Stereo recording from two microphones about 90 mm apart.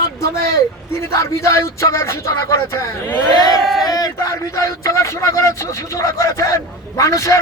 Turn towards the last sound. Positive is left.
turn(degrees=35)  # may be behind; listen again after turning